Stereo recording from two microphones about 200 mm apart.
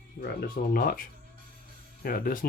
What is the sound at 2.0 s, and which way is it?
Speech, 45° left (ahead or behind).